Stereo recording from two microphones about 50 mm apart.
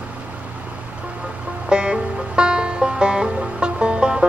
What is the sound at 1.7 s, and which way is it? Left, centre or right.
Music, centre.